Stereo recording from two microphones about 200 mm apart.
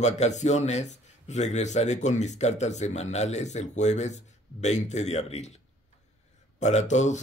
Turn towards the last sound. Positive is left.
turn(degrees=35)  # may be behind; listen again after turning